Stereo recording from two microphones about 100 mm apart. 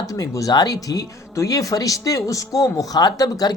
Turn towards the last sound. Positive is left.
turn(degrees=40)  # may be behind; listen again after turning